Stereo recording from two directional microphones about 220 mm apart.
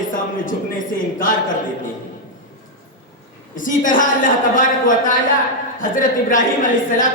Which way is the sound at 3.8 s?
35° left (ahead or behind).